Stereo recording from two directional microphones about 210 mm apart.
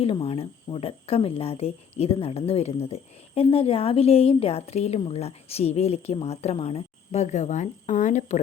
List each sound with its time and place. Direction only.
0.0 s speech: 25° left (ahead or behind)